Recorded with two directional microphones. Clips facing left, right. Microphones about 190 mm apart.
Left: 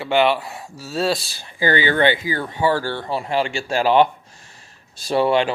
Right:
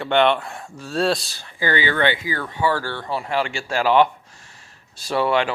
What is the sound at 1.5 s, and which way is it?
Speech, 35° left (ahead or behind).